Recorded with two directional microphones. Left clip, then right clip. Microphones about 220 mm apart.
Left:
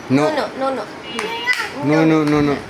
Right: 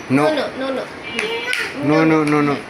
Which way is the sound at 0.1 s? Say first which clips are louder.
Right 1 dB; 20° left (ahead or behind).